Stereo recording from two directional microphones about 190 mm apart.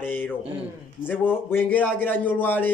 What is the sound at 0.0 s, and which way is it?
A man's voice, 10° left (ahead or behind).